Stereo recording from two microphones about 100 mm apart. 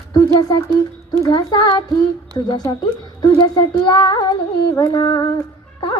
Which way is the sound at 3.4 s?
45° left (ahead or behind).